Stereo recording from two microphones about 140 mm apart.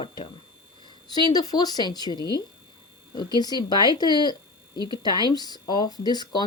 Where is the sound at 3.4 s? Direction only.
30° left (ahead or behind).